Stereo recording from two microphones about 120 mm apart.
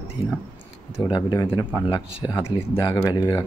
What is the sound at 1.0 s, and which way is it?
Speech, 35° left (ahead or behind).